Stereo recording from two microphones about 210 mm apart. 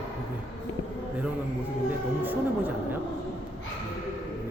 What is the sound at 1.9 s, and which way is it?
Speech, 10° right (ahead or behind).